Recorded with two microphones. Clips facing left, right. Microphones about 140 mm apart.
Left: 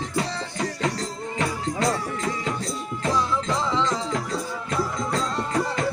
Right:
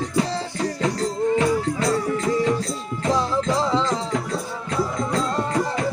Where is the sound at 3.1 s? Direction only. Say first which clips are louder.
Right 4 dB; 35° right (ahead or behind).